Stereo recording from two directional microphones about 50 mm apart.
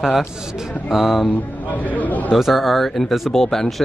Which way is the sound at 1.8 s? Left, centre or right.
Left.